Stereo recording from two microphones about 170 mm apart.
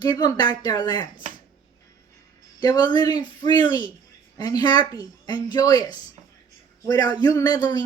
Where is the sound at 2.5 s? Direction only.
25° left (ahead or behind).